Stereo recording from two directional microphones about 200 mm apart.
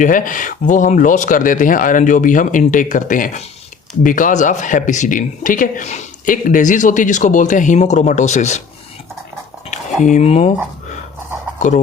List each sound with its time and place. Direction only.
0.0 s speech: 40° left (ahead or behind)
9.6 s speech: 35° left (ahead or behind)